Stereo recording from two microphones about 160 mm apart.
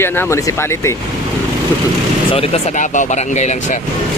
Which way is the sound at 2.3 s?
35° left (ahead or behind).